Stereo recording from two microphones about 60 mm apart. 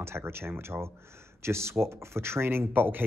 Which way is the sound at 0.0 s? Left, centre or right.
Right.